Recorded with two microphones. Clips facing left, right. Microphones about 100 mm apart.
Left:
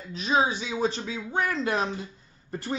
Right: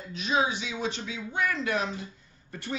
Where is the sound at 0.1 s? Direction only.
35° left (ahead or behind).